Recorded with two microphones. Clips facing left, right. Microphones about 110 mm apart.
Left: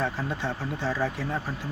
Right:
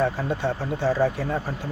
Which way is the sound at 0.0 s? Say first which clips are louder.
Right 5 dB; 50° right (ahead or behind).